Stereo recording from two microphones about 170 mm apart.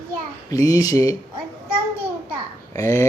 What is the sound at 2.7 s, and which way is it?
Speech, 15° left (ahead or behind).